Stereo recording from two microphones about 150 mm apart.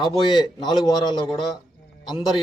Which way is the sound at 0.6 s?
30° left (ahead or behind).